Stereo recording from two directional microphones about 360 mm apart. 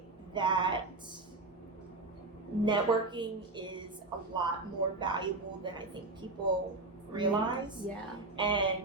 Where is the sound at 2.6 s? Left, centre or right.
Centre.